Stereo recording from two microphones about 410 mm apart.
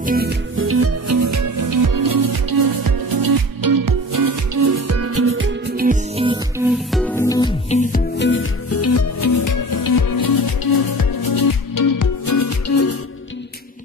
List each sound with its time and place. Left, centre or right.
0.0 s music: right
6.9 s music: centre; by 12.9 s left